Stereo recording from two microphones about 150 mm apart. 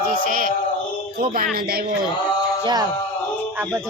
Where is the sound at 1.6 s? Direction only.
90° right.